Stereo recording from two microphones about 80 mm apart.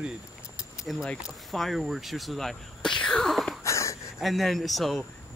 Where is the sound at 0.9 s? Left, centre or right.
Centre.